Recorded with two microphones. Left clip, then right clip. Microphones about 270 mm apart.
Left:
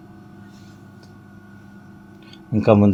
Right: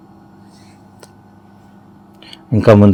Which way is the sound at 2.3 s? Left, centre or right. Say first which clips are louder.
Right 6 dB; right.